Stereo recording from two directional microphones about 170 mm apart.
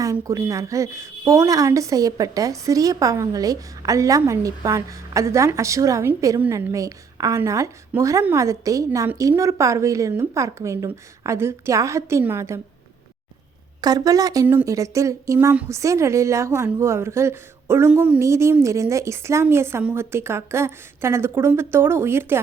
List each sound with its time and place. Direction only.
0.0 s a woman's voice: 20° right (ahead or behind)
13.8 s a woman's voice: 20° right (ahead or behind)